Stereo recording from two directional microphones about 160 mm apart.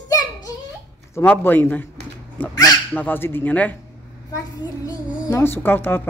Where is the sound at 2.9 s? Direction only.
10° left (ahead or behind).